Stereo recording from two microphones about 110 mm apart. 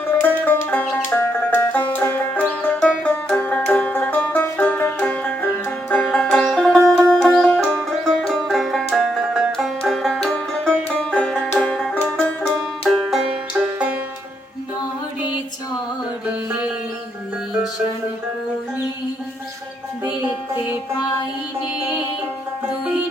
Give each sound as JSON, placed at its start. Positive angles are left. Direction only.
{"t": 0.2, "sound": "music", "side_deg": 15}
{"t": 3.0, "sound": "banjo", "side_deg": 15}
{"t": 5.9, "sound": "music", "side_deg": 10}
{"t": 7.8, "sound": "music", "side_deg": 0}
{"t": 11.6, "sound": "banjo", "side_deg": 10}
{"t": 12.5, "sound": "banjo", "side_deg": 0}